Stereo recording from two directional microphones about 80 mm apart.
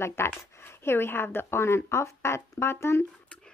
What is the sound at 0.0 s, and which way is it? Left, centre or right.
Speech, left.